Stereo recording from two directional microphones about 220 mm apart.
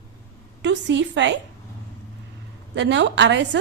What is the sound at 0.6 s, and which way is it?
Speech, 55° right (ahead or behind).